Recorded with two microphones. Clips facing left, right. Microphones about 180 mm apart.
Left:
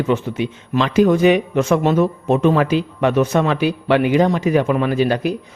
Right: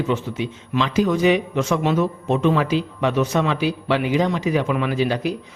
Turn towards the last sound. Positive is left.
turn(degrees=55)  # may be behind; listen again after turning